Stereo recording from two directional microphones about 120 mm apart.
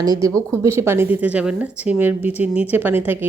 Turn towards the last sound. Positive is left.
turn(degrees=-15)  # may be behind; listen again after turning